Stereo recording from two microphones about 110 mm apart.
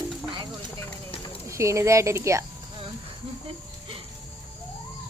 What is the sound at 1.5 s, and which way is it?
Speech, 25° right (ahead or behind).